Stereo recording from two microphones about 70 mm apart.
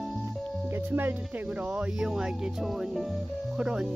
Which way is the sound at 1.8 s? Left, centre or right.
Centre.